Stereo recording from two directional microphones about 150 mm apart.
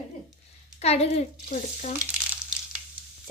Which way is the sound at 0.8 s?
45° left (ahead or behind).